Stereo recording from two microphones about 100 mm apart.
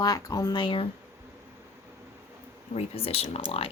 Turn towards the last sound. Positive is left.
turn(degrees=75)  # may be behind; listen again after turning